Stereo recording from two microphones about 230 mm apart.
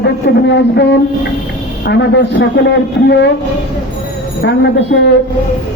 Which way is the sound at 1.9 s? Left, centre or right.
Left.